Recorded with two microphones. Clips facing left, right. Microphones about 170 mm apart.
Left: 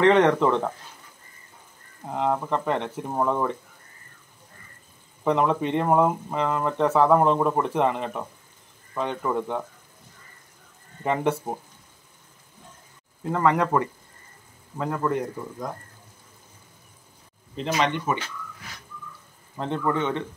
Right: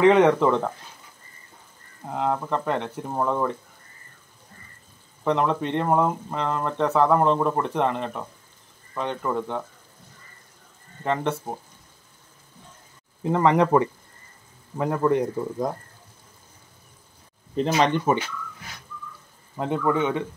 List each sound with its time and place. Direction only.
0.0 s speech: 5° right (ahead or behind)
2.0 s speech: centre (ahead or behind)
5.2 s speech: 5° left (ahead or behind)
11.1 s speech: 5° left (ahead or behind)
13.2 s a man's voice: 20° right (ahead or behind)
17.6 s speech: 35° right (ahead or behind)
19.5 s a man's voice: 10° right (ahead or behind)